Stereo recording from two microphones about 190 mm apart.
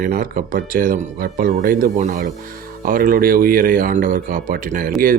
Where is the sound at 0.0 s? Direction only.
50° right (ahead or behind).